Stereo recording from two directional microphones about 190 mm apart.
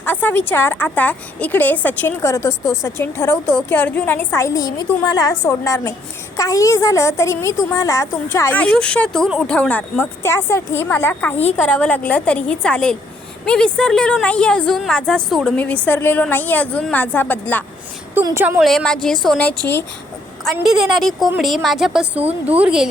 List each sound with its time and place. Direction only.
0.0 s a woman's voice: 10° left (ahead or behind)
18.1 s a woman's voice: 15° right (ahead or behind)
18.6 s a woman's voice: centre (ahead or behind)